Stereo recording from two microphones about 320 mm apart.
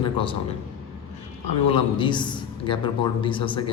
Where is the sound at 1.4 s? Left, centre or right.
Centre.